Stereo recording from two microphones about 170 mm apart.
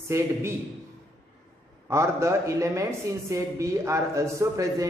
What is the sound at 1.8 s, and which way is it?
A man's voice, 15° right (ahead or behind).